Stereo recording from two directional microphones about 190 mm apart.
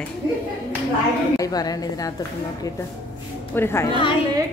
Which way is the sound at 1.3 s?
20° left (ahead or behind).